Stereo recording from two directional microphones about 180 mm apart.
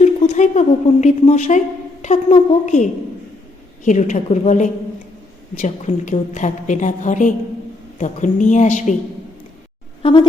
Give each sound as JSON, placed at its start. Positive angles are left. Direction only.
{"t": 0.0, "sound": "a sound", "side_deg": 40}
{"t": 1.0, "sound": "a woman's voice", "side_deg": 40}
{"t": 10.0, "sound": "speech", "side_deg": 30}